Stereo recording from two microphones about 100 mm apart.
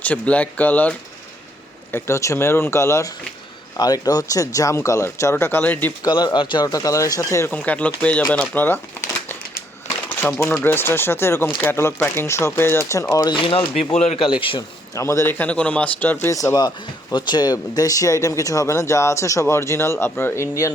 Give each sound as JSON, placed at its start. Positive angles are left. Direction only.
{"t": 0.0, "sound": "speech", "side_deg": 15}
{"t": 3.8, "sound": "speech", "side_deg": 40}
{"t": 6.0, "sound": "speech", "side_deg": 45}
{"t": 6.7, "sound": "speech", "side_deg": 35}
{"t": 7.5, "sound": "speech", "side_deg": 15}
{"t": 10.2, "sound": "speech", "side_deg": 25}
{"t": 13.3, "sound": "speech", "side_deg": 60}
{"t": 14.9, "sound": "speech", "side_deg": 30}
{"t": 16.3, "sound": "speech", "side_deg": 35}